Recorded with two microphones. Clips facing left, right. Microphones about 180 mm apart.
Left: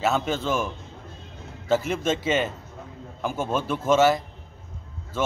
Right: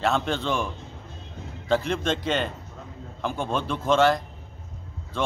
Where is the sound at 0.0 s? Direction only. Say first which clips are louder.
Left 1 dB; 5° left (ahead or behind).